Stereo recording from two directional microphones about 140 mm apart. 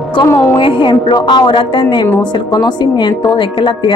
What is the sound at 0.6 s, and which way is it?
Speech, 40° left (ahead or behind).